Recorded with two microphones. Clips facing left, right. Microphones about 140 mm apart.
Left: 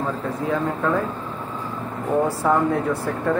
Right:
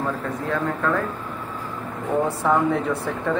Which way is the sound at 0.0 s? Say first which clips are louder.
Left 1 dB; 15° left (ahead or behind).